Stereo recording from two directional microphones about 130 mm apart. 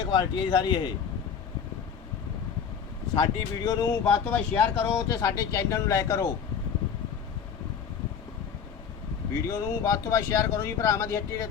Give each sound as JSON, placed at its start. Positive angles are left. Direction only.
{"t": 0.1, "sound": "speech", "side_deg": 35}
{"t": 3.2, "sound": "speech", "side_deg": 35}
{"t": 4.1, "sound": "speech", "side_deg": 15}
{"t": 9.3, "sound": "speech", "side_deg": 25}